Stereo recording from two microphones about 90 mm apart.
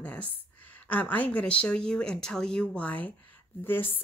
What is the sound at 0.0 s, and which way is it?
Speech, 15° left (ahead or behind).